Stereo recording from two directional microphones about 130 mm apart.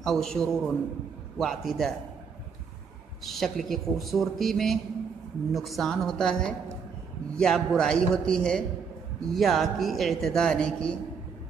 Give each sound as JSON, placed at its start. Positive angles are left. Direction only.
{"t": 0.0, "sound": "a man's voice", "side_deg": 5}
{"t": 3.3, "sound": "a man's voice", "side_deg": 0}